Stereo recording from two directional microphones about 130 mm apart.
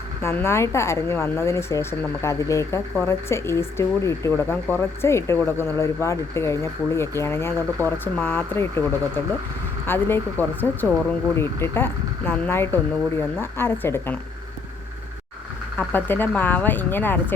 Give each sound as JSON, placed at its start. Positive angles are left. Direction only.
{"t": 0.2, "sound": "speech", "side_deg": 20}
{"t": 15.8, "sound": "speech", "side_deg": 15}